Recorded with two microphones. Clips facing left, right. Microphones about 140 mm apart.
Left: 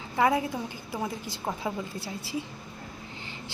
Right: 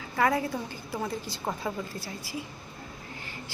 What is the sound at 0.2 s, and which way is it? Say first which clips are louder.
A woman's voice: left 1 dB; 15° left (ahead or behind).